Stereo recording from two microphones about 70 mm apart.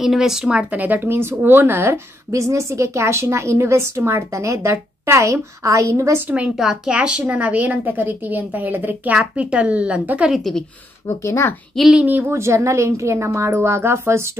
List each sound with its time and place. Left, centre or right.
0.0 s speech: centre
0.7 s a woman's voice: right
6.4 s a woman's voice: centre
10.3 s speech: centre
11.1 s speech: left
11.7 s speech: centre
12.0 s a woman's voice: right
12.3 s a woman's voice: right